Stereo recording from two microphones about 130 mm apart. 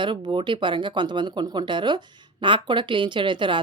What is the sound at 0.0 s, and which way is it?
Speech, 35° right (ahead or behind).